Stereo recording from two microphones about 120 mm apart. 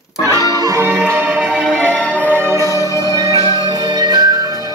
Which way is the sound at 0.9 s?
15° right (ahead or behind).